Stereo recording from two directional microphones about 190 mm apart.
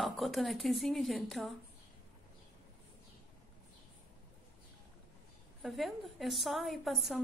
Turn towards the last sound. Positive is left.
turn(degrees=0)  # may be behind; listen again after turning